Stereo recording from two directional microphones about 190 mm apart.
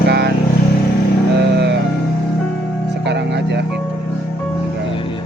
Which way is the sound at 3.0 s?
65° right (ahead or behind).